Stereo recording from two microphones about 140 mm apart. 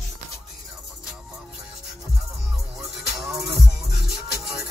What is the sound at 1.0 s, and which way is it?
Music, 5° right (ahead or behind).